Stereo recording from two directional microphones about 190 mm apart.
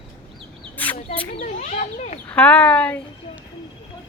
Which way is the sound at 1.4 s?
40° left (ahead or behind).